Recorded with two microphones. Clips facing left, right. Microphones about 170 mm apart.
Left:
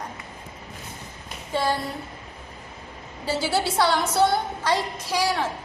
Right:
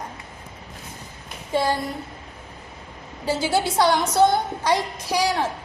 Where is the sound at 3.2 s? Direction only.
15° right (ahead or behind).